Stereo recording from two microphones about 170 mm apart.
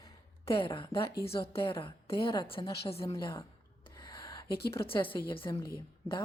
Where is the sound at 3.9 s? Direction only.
25° left (ahead or behind).